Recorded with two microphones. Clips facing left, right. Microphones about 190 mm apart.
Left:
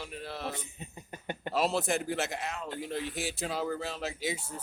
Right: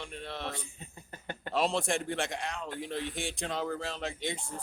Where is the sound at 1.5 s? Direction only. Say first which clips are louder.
Left 1 dB; 5° left (ahead or behind).